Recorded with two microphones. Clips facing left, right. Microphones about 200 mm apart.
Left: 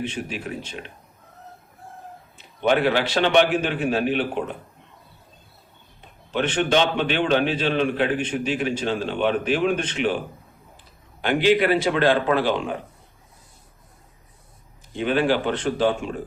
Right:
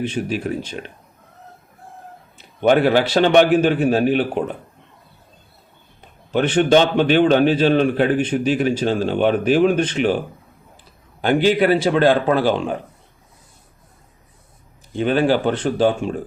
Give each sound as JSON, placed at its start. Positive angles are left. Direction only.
{"t": 0.1, "sound": "a man's voice", "side_deg": -40}
{"t": 2.6, "sound": "a man's voice", "side_deg": -45}
{"t": 6.3, "sound": "a man's voice", "side_deg": -40}
{"t": 11.2, "sound": "a man's voice", "side_deg": -40}
{"t": 14.9, "sound": "a man's voice", "side_deg": -40}